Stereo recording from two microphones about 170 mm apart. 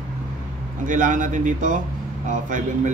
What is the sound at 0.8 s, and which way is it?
A man's voice, 50° right (ahead or behind).